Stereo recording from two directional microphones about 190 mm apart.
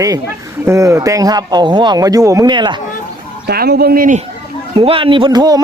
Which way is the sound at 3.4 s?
55° right (ahead or behind).